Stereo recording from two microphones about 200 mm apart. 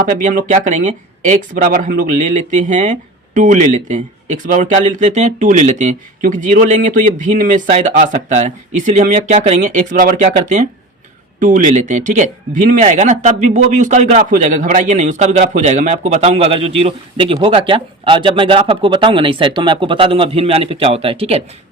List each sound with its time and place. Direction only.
0.0 s speech: 40° right (ahead or behind)